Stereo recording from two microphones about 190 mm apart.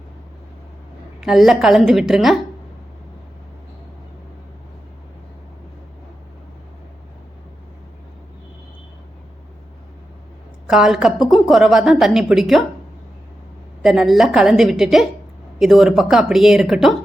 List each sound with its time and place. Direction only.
1.2 s a woman's voice: centre (ahead or behind)
10.7 s a woman's voice: centre (ahead or behind)
13.8 s a woman's voice: centre (ahead or behind)